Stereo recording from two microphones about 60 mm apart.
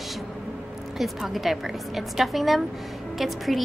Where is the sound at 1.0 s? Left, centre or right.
Centre.